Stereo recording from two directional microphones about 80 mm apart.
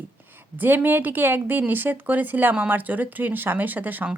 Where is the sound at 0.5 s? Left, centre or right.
Right.